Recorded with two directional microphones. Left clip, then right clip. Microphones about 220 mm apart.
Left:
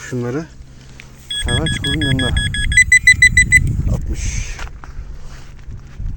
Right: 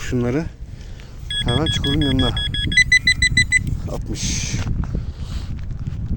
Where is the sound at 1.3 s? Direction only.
50° right (ahead or behind).